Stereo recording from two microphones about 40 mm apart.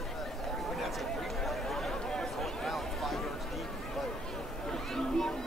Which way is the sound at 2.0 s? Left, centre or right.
Centre.